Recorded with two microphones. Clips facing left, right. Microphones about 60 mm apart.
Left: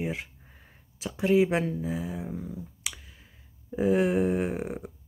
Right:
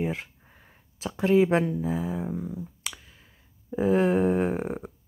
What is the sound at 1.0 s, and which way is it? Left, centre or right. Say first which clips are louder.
Speech: right 2 dB; right.